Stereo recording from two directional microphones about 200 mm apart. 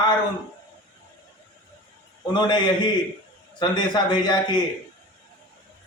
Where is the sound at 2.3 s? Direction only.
20° left (ahead or behind).